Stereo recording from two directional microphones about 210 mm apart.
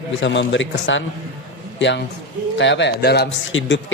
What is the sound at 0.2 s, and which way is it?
Speech, 60° left (ahead or behind).